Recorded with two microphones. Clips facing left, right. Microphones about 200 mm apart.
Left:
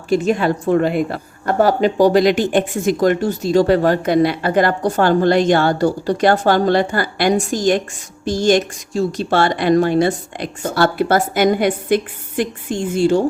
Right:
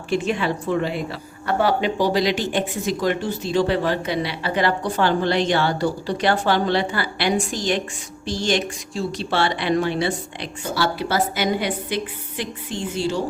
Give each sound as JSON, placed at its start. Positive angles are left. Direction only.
{"t": 0.1, "sound": "a woman's voice", "side_deg": 40}